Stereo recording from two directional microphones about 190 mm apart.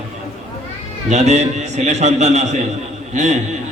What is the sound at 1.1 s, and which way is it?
A man's voice, 35° right (ahead or behind).